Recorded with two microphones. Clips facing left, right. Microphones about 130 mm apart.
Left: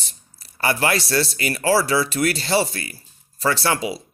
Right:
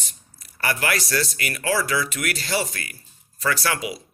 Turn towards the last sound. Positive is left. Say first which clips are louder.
# left 3 dB
turn(degrees=30)  # may be behind; listen again after turning